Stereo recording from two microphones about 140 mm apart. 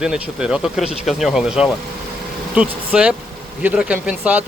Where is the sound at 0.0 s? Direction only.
5° right (ahead or behind).